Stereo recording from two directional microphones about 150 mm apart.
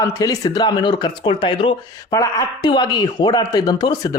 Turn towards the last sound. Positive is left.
turn(degrees=25)  # may be behind; listen again after turning